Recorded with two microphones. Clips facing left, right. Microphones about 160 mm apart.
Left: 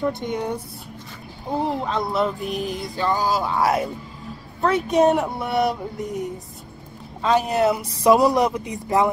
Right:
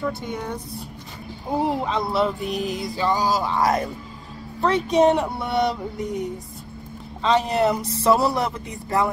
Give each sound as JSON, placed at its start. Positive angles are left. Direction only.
{"t": 0.0, "sound": "speech", "side_deg": 15}
{"t": 1.5, "sound": "music", "side_deg": -5}
{"t": 7.2, "sound": "speech", "side_deg": 5}